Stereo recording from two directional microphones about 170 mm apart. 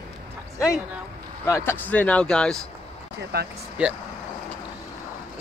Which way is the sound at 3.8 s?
10° right (ahead or behind).